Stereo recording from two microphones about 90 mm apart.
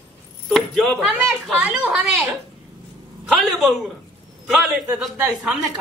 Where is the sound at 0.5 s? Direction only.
5° left (ahead or behind).